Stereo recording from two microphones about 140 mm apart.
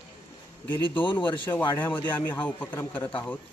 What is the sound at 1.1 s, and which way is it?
Speech, 35° left (ahead or behind).